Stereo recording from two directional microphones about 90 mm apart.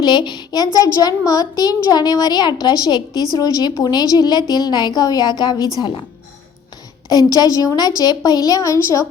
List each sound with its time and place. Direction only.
0.0 s a woman's voice: 55° left (ahead or behind)
7.3 s a woman's voice: 45° left (ahead or behind)